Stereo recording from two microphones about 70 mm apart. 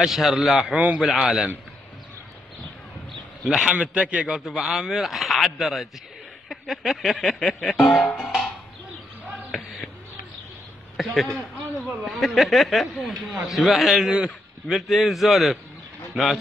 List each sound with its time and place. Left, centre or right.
0.0 s music: centre
0.7 s a man's voice: centre
1.0 s a man's voice: centre
3.1 s a sound: centre
3.7 s a man's voice: centre
4.5 s music: centre
11.0 s speech: centre
12.1 s music: centre
16.1 s a man's voice: centre